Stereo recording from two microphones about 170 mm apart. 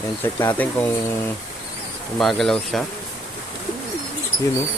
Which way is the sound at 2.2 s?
Centre (ahead or behind).